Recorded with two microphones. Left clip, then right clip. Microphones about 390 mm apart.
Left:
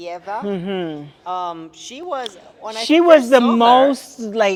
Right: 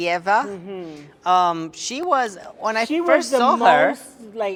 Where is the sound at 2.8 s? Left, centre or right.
Left.